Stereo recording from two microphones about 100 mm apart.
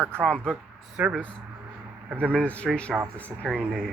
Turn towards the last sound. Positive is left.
turn(degrees=0)  # may be behind; listen again after turning